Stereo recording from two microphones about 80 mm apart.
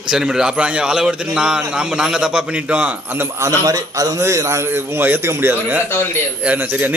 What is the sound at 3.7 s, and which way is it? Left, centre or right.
Speech, right.